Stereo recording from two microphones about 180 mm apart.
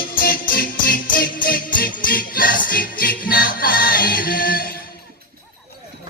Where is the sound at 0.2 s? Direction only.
55° left (ahead or behind).